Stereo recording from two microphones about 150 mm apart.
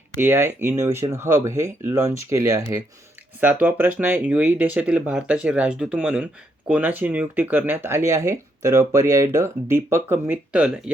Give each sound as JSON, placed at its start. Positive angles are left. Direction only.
{"t": 0.2, "sound": "speech", "side_deg": -15}